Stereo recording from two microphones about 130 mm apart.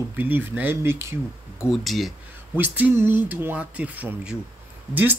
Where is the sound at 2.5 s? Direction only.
15° right (ahead or behind).